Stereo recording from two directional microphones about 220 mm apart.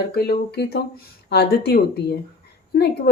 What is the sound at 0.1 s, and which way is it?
Speech, 45° left (ahead or behind).